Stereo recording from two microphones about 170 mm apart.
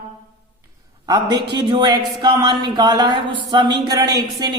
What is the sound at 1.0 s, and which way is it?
Speech, 25° right (ahead or behind).